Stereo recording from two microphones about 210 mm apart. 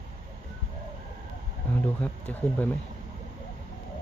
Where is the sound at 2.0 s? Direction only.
5° left (ahead or behind).